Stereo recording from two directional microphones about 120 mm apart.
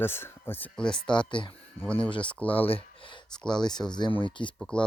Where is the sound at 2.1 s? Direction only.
45° left (ahead or behind).